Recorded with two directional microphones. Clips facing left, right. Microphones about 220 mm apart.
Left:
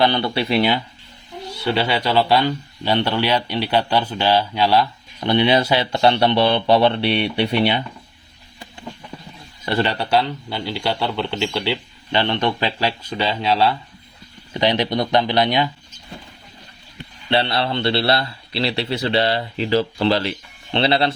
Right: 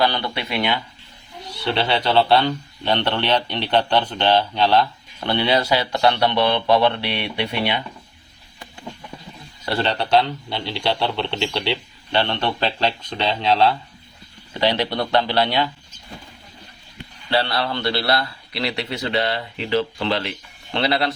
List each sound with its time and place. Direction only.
0.0 s a man's voice: 25° left (ahead or behind)
1.6 s speech: 5° left (ahead or behind); by 7.8 s 30° left (ahead or behind)
9.6 s speech: 15° left (ahead or behind)
12.1 s speech: 15° left (ahead or behind)
14.6 s speech: 15° left (ahead or behind)
17.2 s a man's voice: 20° left (ahead or behind)